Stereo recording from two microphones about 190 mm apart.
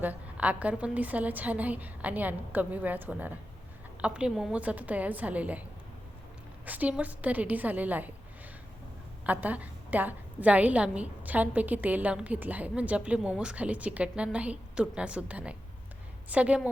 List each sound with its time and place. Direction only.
0.0 s a woman's voice: 10° right (ahead or behind)
6.7 s a woman's voice: 10° right (ahead or behind)
9.2 s a woman's voice: 10° right (ahead or behind)